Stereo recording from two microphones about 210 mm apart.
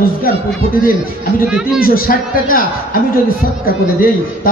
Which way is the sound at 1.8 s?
45° left (ahead or behind).